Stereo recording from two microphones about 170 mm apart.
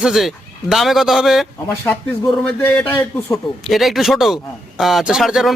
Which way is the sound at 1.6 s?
15° left (ahead or behind).